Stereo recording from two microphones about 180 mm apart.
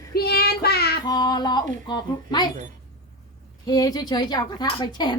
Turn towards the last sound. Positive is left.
turn(degrees=25)  # may be behind; listen again after turning